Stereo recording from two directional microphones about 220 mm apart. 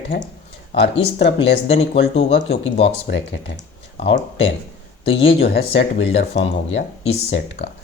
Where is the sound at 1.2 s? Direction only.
55° left (ahead or behind).